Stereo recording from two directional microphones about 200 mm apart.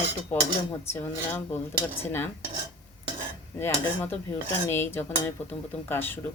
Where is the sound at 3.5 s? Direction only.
10° left (ahead or behind).